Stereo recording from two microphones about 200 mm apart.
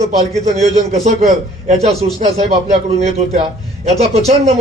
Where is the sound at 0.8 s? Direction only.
35° right (ahead or behind).